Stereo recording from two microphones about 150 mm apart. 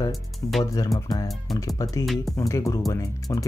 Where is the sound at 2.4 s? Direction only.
20° left (ahead or behind).